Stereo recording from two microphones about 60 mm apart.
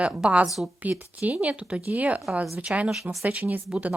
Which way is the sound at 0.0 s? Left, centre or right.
Centre.